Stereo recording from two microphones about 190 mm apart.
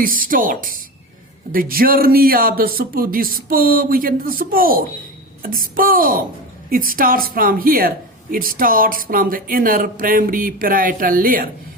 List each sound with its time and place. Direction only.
0.0 s speech: 45° right (ahead or behind)